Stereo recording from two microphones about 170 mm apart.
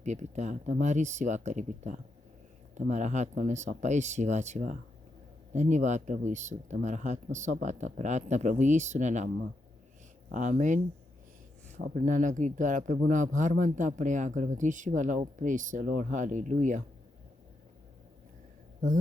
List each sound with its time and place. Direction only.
0.0 s speech: 45° right (ahead or behind)
10.3 s speech: 45° right (ahead or behind)
11.8 s speech: 50° right (ahead or behind)